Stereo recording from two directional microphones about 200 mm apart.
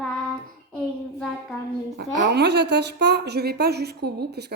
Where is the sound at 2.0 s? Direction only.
55° right (ahead or behind).